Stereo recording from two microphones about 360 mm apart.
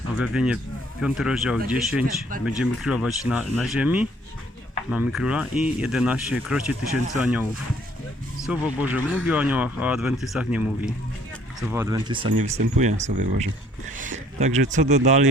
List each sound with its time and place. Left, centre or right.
0.2 s speech: centre